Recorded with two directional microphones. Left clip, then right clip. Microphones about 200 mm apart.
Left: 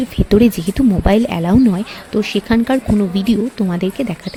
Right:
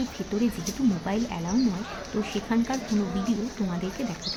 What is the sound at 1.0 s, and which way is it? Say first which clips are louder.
A woman's voice: left 15 dB; 55° left (ahead or behind).